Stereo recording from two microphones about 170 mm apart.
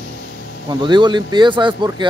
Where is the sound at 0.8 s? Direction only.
25° right (ahead or behind).